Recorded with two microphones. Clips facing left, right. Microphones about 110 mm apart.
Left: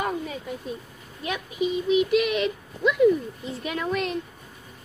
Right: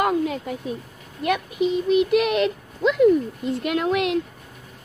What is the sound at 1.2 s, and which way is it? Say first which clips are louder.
Speech: right 5 dB; 60° right (ahead or behind).